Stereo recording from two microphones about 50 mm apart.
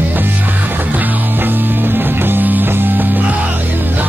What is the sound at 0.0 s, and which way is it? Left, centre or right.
Music, right.